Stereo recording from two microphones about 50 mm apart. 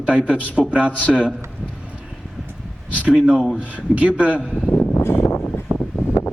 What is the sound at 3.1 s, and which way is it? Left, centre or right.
Speech, centre.